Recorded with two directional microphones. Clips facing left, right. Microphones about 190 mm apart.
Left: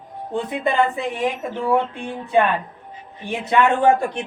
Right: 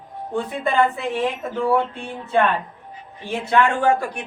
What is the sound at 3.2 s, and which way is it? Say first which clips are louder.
Speech: left 1 dB; 20° left (ahead or behind).